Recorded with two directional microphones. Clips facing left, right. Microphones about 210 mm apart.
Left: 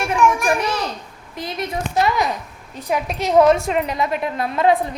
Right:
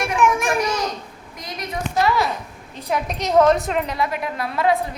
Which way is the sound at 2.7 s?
10° left (ahead or behind).